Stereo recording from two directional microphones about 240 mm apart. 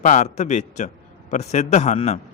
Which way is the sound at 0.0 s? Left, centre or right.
Left.